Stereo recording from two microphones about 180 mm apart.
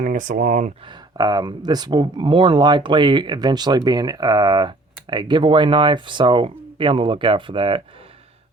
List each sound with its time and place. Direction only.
0.0 s speech: 45° right (ahead or behind)
1.1 s speech: 20° right (ahead or behind)